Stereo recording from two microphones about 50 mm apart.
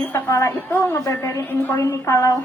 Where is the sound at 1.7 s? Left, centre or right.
Left.